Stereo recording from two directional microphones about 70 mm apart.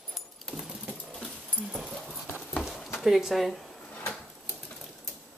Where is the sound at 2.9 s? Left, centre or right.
Centre.